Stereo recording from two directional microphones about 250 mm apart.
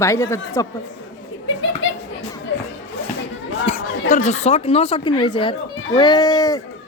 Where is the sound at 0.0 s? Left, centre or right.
Centre.